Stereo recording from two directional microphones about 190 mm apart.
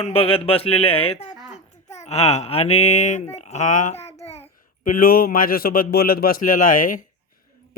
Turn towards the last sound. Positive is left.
turn(degrees=45)  # may be behind; listen again after turning